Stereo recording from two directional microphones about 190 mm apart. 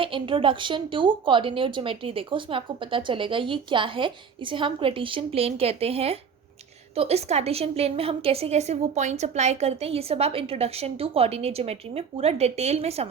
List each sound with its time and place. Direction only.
0.0 s a woman's voice: 25° right (ahead or behind)